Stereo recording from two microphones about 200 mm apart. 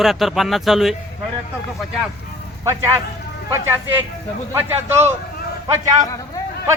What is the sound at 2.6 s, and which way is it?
Speech, 15° right (ahead or behind).